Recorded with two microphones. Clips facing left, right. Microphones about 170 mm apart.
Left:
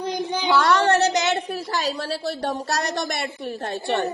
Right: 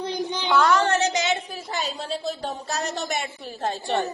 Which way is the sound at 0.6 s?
70° left (ahead or behind).